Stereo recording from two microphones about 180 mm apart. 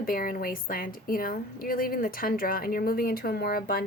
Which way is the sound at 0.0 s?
55° left (ahead or behind).